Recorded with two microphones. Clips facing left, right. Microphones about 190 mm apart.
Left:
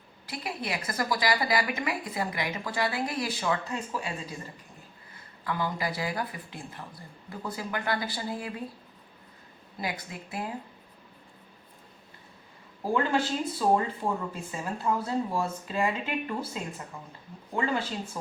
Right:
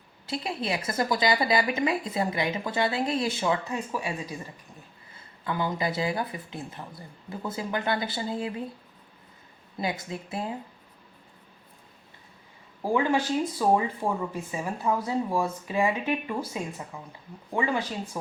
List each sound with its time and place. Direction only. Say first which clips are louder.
0.3 s speech: right 4 dB; 25° right (ahead or behind)
5.5 s speech: right 2 dB; 25° right (ahead or behind)
9.7 s speech: right 4 dB; 25° right (ahead or behind)
12.8 s speech: right 2 dB; 15° right (ahead or behind)